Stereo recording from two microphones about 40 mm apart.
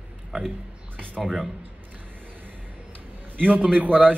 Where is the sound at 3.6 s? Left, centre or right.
Right.